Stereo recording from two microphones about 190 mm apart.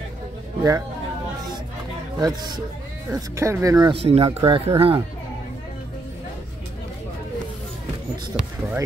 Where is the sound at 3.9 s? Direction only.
30° right (ahead or behind).